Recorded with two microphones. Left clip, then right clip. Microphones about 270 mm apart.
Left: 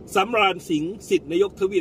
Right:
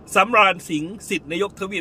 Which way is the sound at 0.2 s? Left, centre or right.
Centre.